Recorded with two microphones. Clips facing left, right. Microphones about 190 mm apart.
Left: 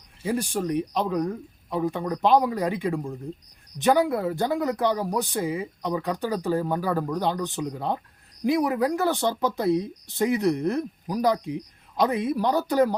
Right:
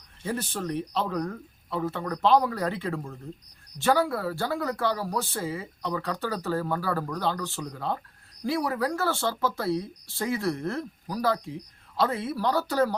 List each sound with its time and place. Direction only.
0.2 s speech: 10° left (ahead or behind)